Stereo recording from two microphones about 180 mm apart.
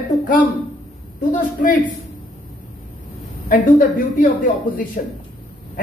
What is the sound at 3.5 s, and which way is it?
A woman's voice, 50° left (ahead or behind).